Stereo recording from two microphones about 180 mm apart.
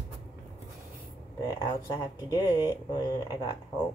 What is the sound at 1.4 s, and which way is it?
Speech, 20° left (ahead or behind).